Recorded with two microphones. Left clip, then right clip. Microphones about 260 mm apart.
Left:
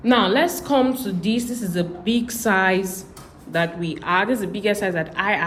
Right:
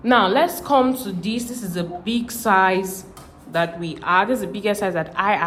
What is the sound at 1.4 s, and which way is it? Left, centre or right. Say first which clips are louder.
Speech: left 3 dB; right.